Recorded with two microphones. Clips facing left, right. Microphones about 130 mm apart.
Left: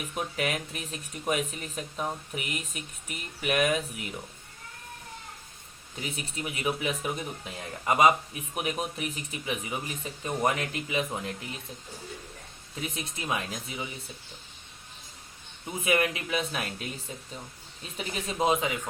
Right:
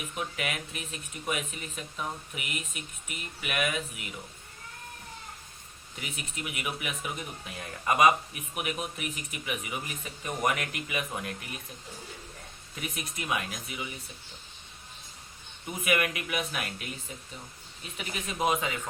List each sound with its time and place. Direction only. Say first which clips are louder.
0.2 s speech: left 4 dB; 35° left (ahead or behind)
6.0 s speech: left 4 dB; 30° left (ahead or behind)
12.8 s speech: left 2 dB; 25° left (ahead or behind)
15.8 s speech: left 2 dB; 30° left (ahead or behind)
17.9 s speech: left 3 dB; 30° left (ahead or behind)